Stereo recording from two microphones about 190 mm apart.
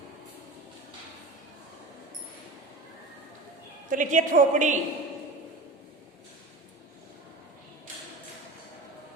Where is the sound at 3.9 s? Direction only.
45° right (ahead or behind).